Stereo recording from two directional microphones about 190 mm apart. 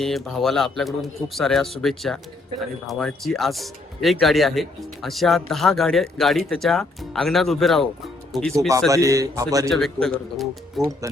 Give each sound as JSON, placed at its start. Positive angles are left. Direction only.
{"t": 0.0, "sound": "speech", "side_deg": 0}
{"t": 8.9, "sound": "speech", "side_deg": -15}
{"t": 9.6, "sound": "speech", "side_deg": 0}